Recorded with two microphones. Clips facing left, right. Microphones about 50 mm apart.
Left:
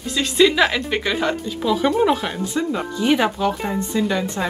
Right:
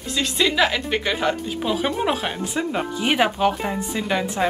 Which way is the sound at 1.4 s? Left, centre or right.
Right.